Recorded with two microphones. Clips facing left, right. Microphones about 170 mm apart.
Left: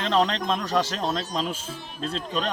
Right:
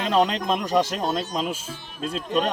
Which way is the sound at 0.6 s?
15° right (ahead or behind).